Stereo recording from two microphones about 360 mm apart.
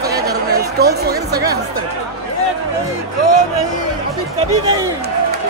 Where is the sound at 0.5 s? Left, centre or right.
Right.